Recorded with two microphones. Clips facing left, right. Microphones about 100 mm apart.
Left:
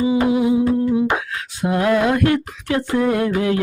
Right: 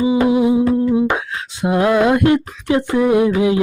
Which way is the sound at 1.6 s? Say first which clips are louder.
Right 3 dB; 20° right (ahead or behind).